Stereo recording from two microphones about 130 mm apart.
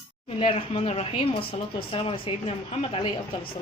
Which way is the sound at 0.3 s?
45° left (ahead or behind).